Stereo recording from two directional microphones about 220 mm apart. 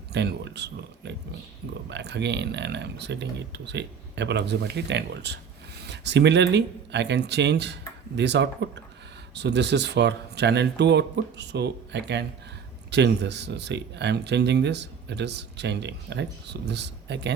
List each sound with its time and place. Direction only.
0.1 s speech: 50° right (ahead or behind)